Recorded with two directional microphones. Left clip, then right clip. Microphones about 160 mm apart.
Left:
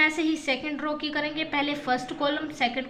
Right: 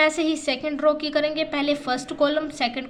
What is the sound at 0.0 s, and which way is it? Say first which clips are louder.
A woman's voice: right 3 dB; 35° right (ahead or behind).